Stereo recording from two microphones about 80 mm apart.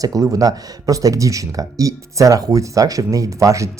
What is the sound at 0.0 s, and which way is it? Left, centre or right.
Speech, right.